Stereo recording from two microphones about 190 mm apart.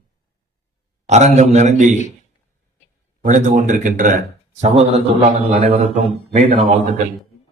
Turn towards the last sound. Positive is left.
turn(degrees=-35)  # may be behind; listen again after turning